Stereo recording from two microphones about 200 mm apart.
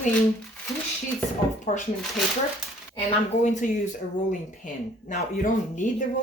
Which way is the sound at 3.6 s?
40° left (ahead or behind).